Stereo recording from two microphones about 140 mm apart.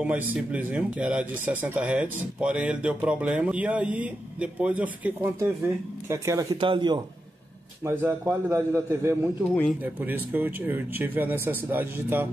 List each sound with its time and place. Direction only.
0.0 s a man's voice: 10° right (ahead or behind)
6.6 s a man's voice: 35° right (ahead or behind)
7.8 s a man's voice: 15° right (ahead or behind)